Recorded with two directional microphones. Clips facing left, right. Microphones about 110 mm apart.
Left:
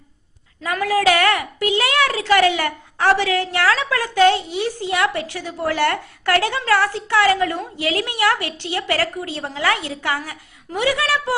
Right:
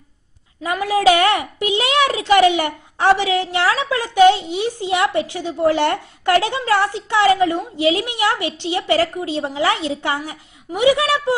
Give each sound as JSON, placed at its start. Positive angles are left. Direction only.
{"t": 0.6, "sound": "a child's voice", "side_deg": -20}